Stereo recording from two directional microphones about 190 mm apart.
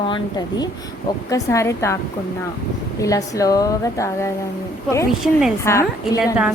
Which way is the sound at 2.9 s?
15° left (ahead or behind).